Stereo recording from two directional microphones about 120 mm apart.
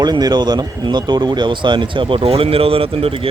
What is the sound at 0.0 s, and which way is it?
Speech, 35° right (ahead or behind).